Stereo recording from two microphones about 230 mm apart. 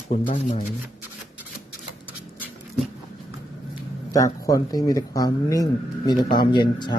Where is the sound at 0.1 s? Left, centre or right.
Left.